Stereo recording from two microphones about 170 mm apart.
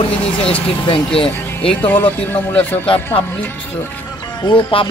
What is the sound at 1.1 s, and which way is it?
Speech, 35° left (ahead or behind).